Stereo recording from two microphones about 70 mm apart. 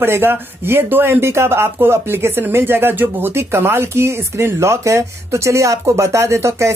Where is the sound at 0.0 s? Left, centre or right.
Right.